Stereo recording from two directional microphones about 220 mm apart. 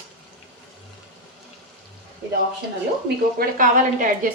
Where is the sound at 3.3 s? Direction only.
35° right (ahead or behind).